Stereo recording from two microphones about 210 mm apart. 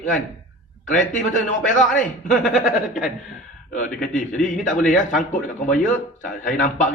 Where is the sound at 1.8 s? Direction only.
Centre (ahead or behind).